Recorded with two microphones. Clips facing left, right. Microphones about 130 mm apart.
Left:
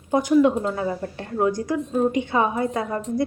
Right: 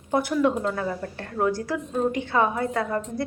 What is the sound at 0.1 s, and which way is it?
A woman's voice, 15° left (ahead or behind).